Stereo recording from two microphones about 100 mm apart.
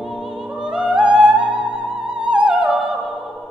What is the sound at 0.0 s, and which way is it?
Music, 10° right (ahead or behind).